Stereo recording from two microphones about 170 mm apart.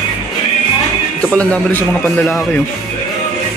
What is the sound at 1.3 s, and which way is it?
Speech, 10° left (ahead or behind).